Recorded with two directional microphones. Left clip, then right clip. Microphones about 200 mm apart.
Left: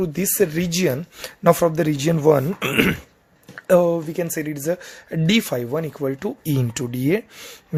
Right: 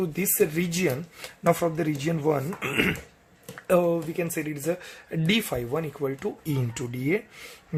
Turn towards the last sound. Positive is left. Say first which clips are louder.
# left 6 dB
turn(degrees=40)  # may be behind; listen again after turning